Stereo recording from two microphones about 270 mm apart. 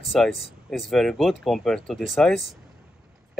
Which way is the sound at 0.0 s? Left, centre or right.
Centre.